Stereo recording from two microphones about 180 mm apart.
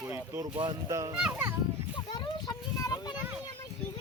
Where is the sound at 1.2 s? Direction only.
10° right (ahead or behind).